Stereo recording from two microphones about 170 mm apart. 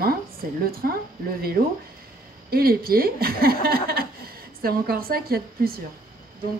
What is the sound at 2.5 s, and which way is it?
A woman's voice, 60° right (ahead or behind).